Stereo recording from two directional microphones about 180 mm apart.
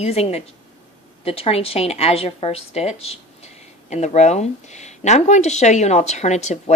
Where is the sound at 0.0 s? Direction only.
35° left (ahead or behind).